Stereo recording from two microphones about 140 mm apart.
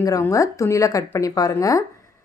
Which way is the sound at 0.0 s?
25° left (ahead or behind).